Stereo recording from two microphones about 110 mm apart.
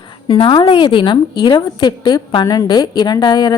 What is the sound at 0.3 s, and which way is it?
A woman's voice, 50° left (ahead or behind).